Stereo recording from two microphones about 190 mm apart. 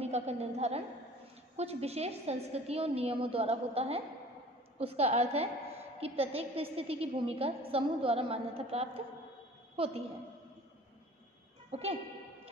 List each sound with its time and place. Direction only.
0.0 s a woman's voice: 35° right (ahead or behind)
11.7 s a woman's voice: 30° right (ahead or behind)